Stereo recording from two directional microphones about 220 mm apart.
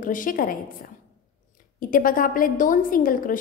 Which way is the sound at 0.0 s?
40° left (ahead or behind).